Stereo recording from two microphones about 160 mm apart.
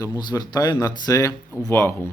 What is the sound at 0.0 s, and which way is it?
Speech, 25° left (ahead or behind).